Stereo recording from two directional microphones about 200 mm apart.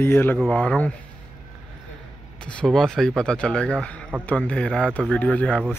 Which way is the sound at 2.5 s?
5° left (ahead or behind).